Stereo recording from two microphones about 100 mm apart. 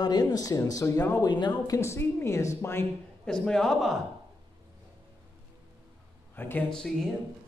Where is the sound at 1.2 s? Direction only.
45° left (ahead or behind).